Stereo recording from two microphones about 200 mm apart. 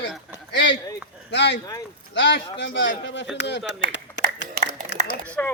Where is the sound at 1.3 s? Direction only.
60° left (ahead or behind).